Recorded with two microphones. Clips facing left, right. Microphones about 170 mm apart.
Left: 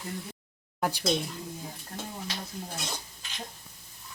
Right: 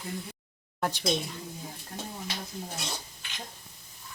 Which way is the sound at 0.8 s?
5° left (ahead or behind).